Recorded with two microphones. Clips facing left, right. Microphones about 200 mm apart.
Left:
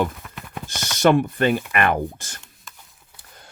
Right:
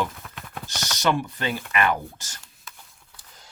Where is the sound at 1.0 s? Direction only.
55° left (ahead or behind).